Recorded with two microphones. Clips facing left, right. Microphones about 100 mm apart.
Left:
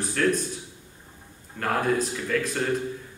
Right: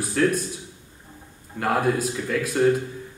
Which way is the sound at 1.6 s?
5° right (ahead or behind).